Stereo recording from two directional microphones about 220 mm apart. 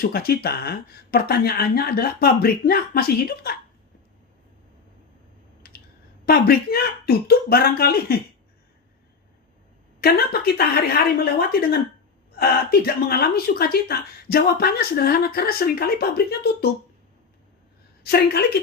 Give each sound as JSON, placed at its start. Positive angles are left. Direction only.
{"t": 0.0, "sound": "a woman's voice", "side_deg": 45}
{"t": 5.6, "sound": "clicking", "side_deg": 40}
{"t": 6.2, "sound": "a woman's voice", "side_deg": 45}
{"t": 10.0, "sound": "a woman's voice", "side_deg": 45}
{"t": 18.0, "sound": "a woman's voice", "side_deg": 45}